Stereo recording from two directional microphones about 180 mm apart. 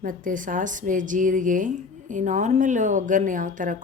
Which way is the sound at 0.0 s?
50° right (ahead or behind).